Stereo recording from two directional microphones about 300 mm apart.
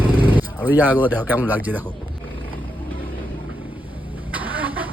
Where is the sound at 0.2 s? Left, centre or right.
Centre.